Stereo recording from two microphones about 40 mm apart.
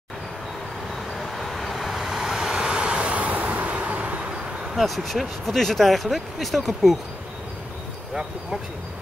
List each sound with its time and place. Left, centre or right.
1.2 s vehicle: centre; by 4.3 s right
4.7 s speech: centre